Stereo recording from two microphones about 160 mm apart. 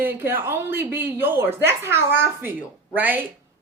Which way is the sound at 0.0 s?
15° right (ahead or behind).